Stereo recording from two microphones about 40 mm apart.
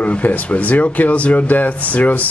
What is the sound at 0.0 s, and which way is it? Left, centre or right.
Speech, left.